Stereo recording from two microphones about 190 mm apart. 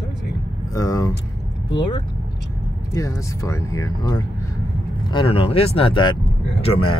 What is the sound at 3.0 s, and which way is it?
Speech, 15° left (ahead or behind).